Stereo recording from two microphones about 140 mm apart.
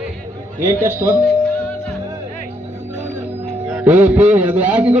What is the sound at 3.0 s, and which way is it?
Music, 50° right (ahead or behind).